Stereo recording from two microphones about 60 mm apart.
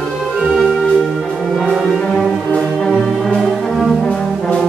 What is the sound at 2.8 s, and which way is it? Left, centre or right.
Music, centre.